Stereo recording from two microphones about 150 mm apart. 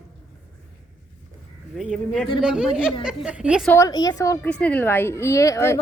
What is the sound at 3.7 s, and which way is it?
Speech, 20° left (ahead or behind).